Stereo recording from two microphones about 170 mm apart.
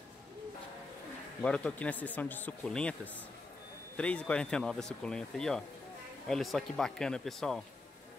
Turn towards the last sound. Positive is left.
turn(degrees=0)  # may be behind; listen again after turning